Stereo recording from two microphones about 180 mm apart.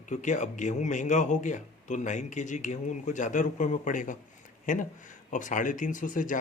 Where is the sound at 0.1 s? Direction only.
45° left (ahead or behind).